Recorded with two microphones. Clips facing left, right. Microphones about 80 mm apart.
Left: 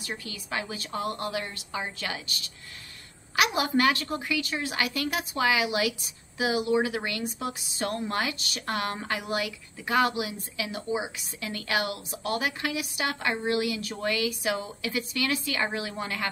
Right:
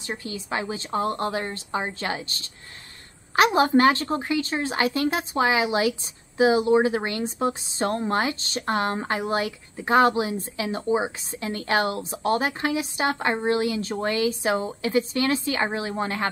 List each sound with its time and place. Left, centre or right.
0.0 s a woman's voice: right